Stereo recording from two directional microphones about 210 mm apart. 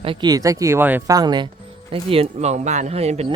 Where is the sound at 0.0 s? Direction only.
25° right (ahead or behind).